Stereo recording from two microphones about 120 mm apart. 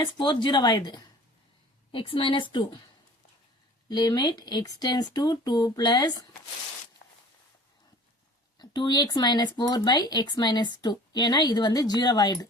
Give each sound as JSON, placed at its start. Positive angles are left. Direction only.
{"t": 0.0, "sound": "speech", "side_deg": 40}
{"t": 1.9, "sound": "speech", "side_deg": 45}
{"t": 3.8, "sound": "speech", "side_deg": 35}
{"t": 8.5, "sound": "speech", "side_deg": 40}